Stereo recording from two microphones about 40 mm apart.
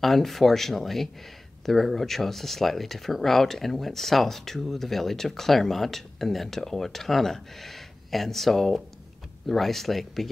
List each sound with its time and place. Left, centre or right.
0.0 s speech: centre